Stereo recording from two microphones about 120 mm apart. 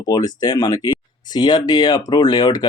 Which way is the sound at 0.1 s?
35° left (ahead or behind).